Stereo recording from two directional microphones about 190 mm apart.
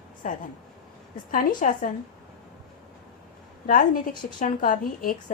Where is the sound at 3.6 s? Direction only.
45° left (ahead or behind).